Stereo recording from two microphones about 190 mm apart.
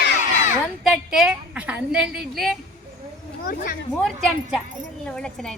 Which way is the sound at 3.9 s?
Centre (ahead or behind).